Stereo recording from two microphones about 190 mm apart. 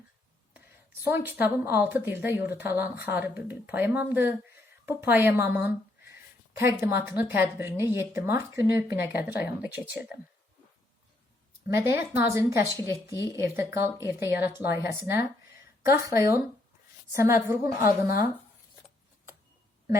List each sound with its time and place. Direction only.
1.0 s a woman's voice: 10° right (ahead or behind)
11.7 s a woman's voice: 10° right (ahead or behind)